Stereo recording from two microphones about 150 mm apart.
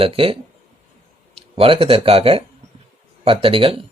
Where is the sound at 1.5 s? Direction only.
40° right (ahead or behind).